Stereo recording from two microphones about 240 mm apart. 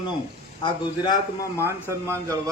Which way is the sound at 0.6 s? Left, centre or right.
Centre.